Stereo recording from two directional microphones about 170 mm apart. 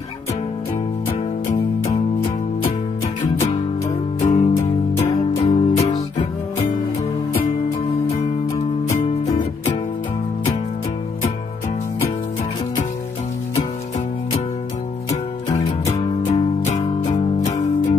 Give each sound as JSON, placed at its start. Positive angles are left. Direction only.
{"t": 4.2, "sound": "music", "side_deg": 40}
{"t": 15.5, "sound": "music", "side_deg": 35}